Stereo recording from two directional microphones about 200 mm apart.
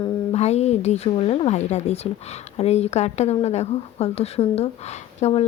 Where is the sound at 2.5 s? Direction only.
30° left (ahead or behind).